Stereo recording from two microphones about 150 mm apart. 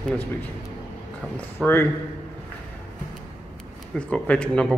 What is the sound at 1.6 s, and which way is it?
Speech, 15° left (ahead or behind).